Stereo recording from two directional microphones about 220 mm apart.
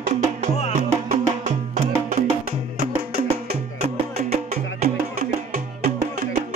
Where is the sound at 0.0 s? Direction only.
30° right (ahead or behind).